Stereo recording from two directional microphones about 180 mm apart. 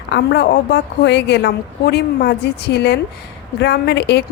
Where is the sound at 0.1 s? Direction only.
70° left (ahead or behind).